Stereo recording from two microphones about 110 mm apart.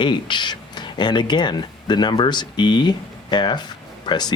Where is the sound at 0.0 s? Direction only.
45° left (ahead or behind).